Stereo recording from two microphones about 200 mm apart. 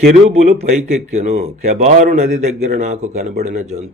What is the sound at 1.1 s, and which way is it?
A man's voice, 35° right (ahead or behind).